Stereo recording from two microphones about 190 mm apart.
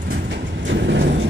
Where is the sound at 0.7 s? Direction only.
65° right (ahead or behind).